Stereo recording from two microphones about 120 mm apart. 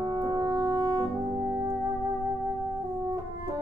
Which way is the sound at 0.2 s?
35° right (ahead or behind).